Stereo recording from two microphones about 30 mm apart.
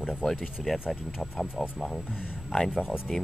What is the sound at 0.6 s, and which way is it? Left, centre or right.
Speech, centre.